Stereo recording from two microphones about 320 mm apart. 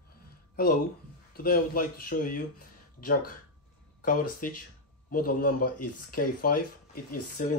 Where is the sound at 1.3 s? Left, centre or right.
Left.